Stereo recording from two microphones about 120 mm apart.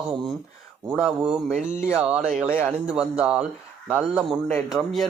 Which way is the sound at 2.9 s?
5° right (ahead or behind).